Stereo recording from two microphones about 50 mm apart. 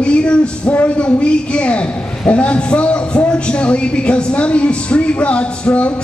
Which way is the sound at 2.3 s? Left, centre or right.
Left.